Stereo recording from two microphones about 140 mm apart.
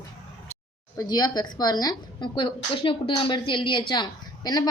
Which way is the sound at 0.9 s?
30° left (ahead or behind).